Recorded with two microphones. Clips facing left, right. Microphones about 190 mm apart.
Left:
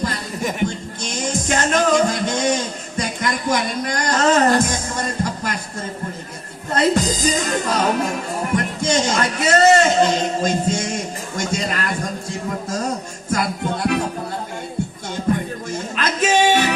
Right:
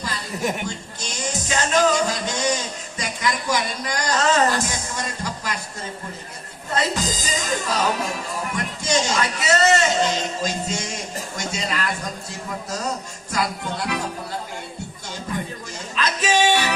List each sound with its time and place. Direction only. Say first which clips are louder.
0.6 s music: left 8 dB; 55° left (ahead or behind)
3.2 s speech: left 2 dB; 55° left (ahead or behind)
6.7 s a woman's voice: left 6 dB; 55° left (ahead or behind)
13.3 s music: left 4 dB; 50° left (ahead or behind)
16.0 s music: left 3 dB; 55° left (ahead or behind)